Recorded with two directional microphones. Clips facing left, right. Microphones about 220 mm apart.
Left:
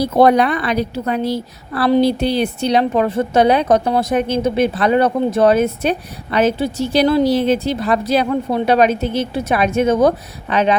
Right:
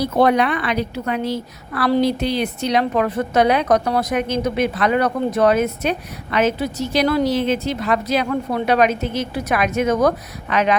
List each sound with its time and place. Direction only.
0.0 s a woman's voice: 35° left (ahead or behind)